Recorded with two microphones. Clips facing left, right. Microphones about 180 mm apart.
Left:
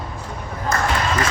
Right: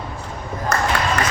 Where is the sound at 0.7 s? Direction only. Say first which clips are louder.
Right 1 dB; 70° right (ahead or behind).